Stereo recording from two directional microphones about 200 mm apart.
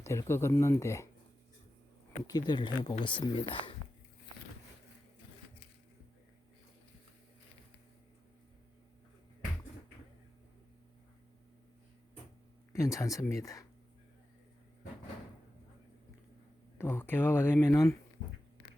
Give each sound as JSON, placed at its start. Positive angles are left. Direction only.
{"t": 0.0, "sound": "speech", "side_deg": 15}
{"t": 2.2, "sound": "speech", "side_deg": 20}
{"t": 12.7, "sound": "speech", "side_deg": 15}
{"t": 16.7, "sound": "speech", "side_deg": 10}